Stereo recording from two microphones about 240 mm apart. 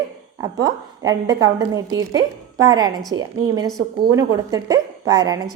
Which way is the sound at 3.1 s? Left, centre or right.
Right.